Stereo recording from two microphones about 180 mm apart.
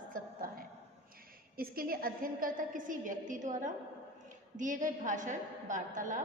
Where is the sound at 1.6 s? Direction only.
55° right (ahead or behind).